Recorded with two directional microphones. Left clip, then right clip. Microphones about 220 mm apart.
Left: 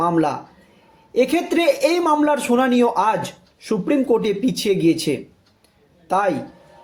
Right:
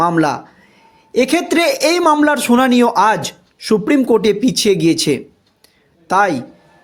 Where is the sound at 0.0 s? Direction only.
45° right (ahead or behind).